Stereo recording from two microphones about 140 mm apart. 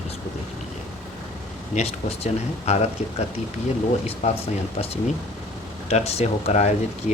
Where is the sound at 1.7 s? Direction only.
50° left (ahead or behind).